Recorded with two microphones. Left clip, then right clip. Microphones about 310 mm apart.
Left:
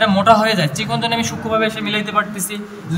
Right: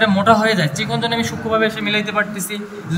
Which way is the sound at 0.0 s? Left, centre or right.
Left.